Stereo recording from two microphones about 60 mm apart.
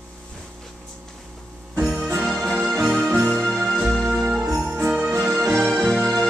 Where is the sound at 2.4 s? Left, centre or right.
Centre.